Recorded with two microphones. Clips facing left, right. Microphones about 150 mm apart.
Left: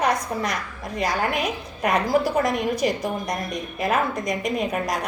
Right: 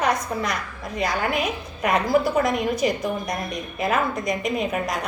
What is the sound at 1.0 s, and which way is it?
A woman's voice, 45° left (ahead or behind).